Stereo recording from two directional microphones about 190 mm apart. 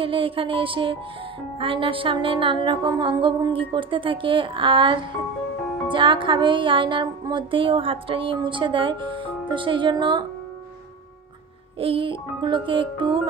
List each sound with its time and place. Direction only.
0.0 s music: 25° right (ahead or behind)
11.8 s music: 25° right (ahead or behind)